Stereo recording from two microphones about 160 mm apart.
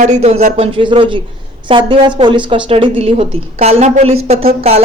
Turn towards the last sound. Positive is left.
turn(degrees=-40)  # may be behind; listen again after turning